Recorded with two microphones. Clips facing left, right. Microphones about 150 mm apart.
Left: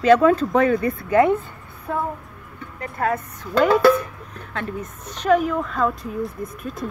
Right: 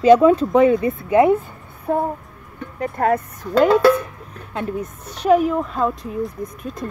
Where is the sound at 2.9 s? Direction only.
45° right (ahead or behind).